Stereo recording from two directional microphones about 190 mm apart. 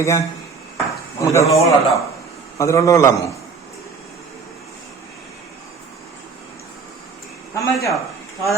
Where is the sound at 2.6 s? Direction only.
15° left (ahead or behind).